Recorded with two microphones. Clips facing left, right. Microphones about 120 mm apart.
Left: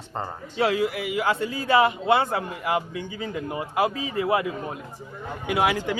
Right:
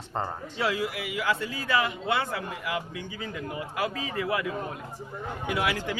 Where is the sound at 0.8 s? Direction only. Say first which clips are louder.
Left 6 dB; 25° left (ahead or behind).